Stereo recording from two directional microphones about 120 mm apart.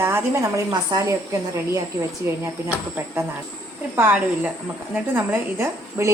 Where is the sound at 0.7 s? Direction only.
35° right (ahead or behind).